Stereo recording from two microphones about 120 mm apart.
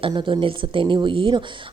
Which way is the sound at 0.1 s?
40° right (ahead or behind).